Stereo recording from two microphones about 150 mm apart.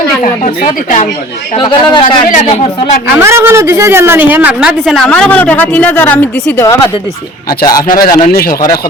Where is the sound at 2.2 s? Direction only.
60° left (ahead or behind).